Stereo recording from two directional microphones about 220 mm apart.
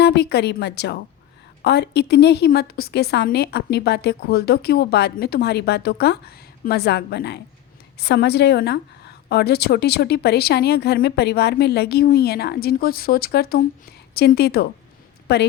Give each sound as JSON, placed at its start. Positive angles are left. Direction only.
{"t": 0.0, "sound": "a woman's voice", "side_deg": 50}